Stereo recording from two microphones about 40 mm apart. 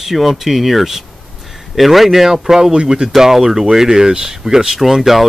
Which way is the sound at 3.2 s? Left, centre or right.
Centre.